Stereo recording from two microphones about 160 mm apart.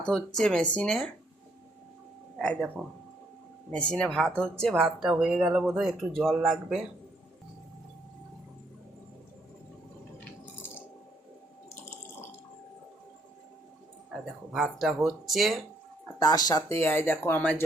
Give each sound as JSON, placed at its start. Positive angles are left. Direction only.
{"t": 0.0, "sound": "speech", "side_deg": 5}
{"t": 2.4, "sound": "speech", "side_deg": 5}
{"t": 3.7, "sound": "speech", "side_deg": 5}
{"t": 14.1, "sound": "speech", "side_deg": 0}
{"t": 16.1, "sound": "speech", "side_deg": 25}